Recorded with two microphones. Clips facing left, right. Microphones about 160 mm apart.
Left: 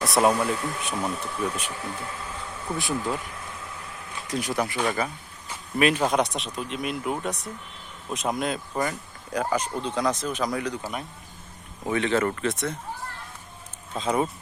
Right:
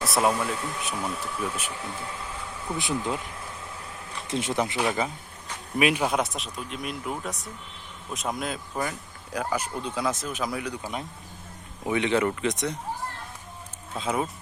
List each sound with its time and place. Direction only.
0.0 s speech: centre (ahead or behind)
2.7 s speech: 20° right (ahead or behind)
4.3 s speech: 25° right (ahead or behind); by 10.8 s 5° right (ahead or behind)
11.9 s speech: 15° right (ahead or behind)
13.9 s speech: 5° right (ahead or behind)